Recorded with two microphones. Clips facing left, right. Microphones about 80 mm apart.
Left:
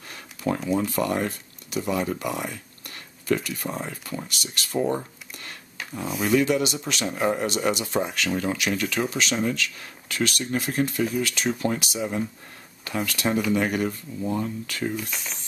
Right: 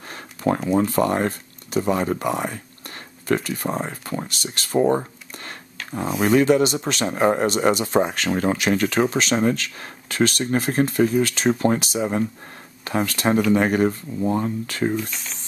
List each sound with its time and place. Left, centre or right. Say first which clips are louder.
0.1 s speech: right 5 dB; right
15.0 s speech: right 4 dB; centre